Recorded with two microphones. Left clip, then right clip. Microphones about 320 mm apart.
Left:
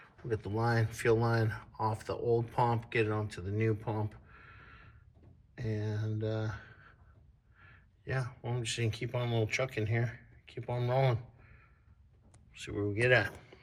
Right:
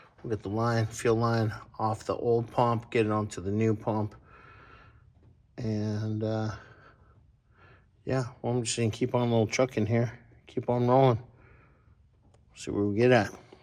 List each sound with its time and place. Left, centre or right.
0.3 s speech: centre
5.5 s speech: centre
8.0 s speech: centre
12.5 s speech: centre